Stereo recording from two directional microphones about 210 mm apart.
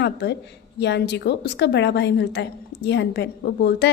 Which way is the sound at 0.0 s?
55° left (ahead or behind).